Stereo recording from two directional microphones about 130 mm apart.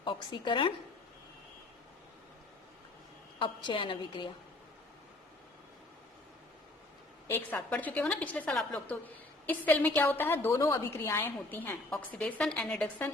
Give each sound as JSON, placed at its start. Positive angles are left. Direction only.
{"t": 0.0, "sound": "a woman's voice", "side_deg": 35}
{"t": 3.3, "sound": "a woman's voice", "side_deg": 40}
{"t": 7.3, "sound": "a woman's voice", "side_deg": 15}